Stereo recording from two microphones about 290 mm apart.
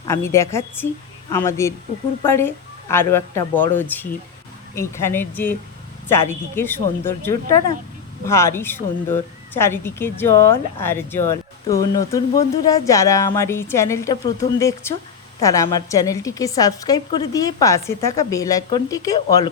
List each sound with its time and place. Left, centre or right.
0.1 s speech: centre